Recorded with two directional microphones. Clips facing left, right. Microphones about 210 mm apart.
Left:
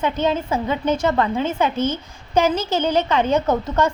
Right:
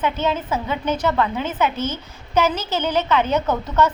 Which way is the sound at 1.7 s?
10° left (ahead or behind).